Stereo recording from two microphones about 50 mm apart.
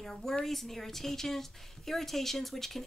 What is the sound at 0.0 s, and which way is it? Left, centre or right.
A woman's voice, centre.